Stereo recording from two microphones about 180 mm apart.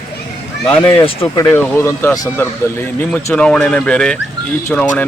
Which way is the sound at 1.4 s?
15° left (ahead or behind).